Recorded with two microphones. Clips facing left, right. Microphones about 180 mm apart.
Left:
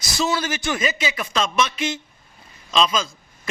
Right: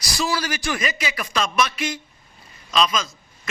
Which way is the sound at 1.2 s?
Centre (ahead or behind).